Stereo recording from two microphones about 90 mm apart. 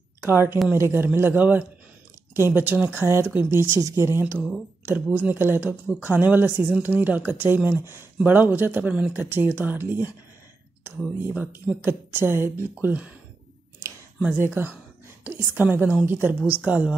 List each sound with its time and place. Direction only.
0.3 s speech: 25° right (ahead or behind)
11.3 s speech: 15° right (ahead or behind)
14.4 s speech: 25° right (ahead or behind)